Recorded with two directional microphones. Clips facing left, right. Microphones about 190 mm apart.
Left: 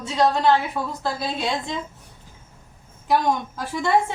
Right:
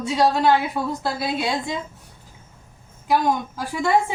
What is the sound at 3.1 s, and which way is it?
Speech, 5° right (ahead or behind).